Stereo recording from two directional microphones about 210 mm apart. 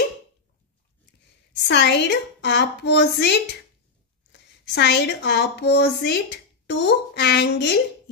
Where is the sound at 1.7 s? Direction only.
55° left (ahead or behind).